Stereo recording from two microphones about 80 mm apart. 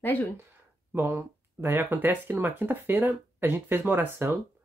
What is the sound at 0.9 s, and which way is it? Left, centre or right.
Speech, right.